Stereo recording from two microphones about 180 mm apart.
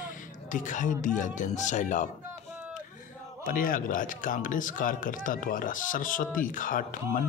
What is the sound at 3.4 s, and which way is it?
Speech, 50° left (ahead or behind).